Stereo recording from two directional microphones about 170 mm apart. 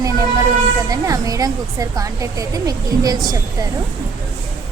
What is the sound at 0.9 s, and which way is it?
A woman's voice, 20° right (ahead or behind).